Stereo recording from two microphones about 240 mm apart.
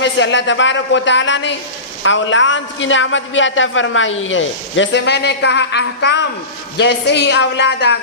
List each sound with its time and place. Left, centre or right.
0.0 s a woman's voice: left